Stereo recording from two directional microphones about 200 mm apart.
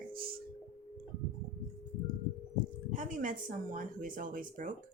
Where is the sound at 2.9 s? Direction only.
40° right (ahead or behind).